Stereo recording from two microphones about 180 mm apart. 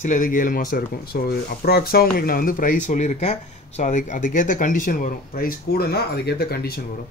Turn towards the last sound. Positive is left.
turn(degrees=60)  # may be behind; listen again after turning